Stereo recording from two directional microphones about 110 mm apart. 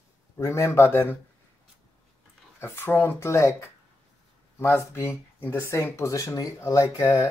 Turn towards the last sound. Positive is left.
turn(degrees=30)  # may be behind; listen again after turning